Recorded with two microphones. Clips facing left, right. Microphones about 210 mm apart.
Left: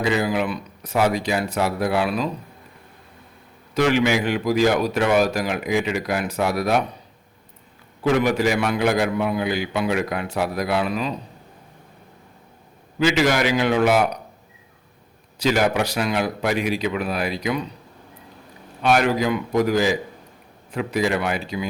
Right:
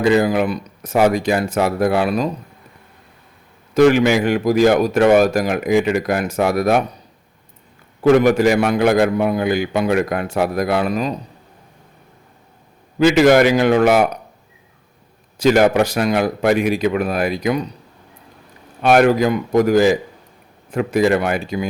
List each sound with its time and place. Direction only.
0.0 s a man's voice: 50° right (ahead or behind)
3.8 s a man's voice: 50° right (ahead or behind)
8.0 s a man's voice: 50° right (ahead or behind)
13.0 s a man's voice: 50° right (ahead or behind)
15.4 s a man's voice: 50° right (ahead or behind)
18.8 s a man's voice: 50° right (ahead or behind)